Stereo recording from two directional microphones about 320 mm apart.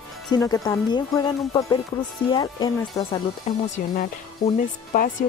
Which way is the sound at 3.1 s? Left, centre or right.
Left.